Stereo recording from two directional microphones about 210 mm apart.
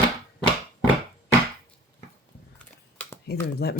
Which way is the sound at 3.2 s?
50° left (ahead or behind).